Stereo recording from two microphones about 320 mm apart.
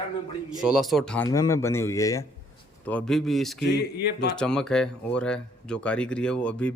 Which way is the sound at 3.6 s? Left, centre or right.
Left.